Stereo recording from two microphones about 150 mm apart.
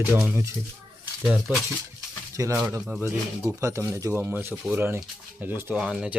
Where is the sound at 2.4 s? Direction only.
20° right (ahead or behind); by 6.1 s 5° right (ahead or behind).